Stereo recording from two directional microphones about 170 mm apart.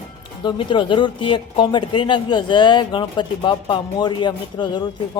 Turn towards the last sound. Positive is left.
turn(degrees=25)  # may be behind; listen again after turning